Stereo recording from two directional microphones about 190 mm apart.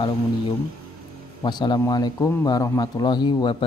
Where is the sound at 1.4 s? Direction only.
25° left (ahead or behind).